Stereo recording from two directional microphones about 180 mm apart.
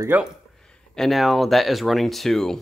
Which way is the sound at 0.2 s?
5° left (ahead or behind).